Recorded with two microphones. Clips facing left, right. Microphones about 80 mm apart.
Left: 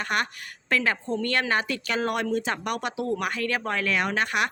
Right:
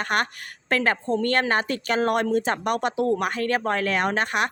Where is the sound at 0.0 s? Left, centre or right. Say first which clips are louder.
Right 3 dB; right.